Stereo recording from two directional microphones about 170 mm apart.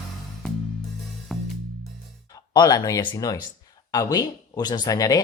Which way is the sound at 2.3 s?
25° left (ahead or behind).